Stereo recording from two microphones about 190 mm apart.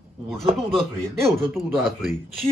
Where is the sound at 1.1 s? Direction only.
15° right (ahead or behind).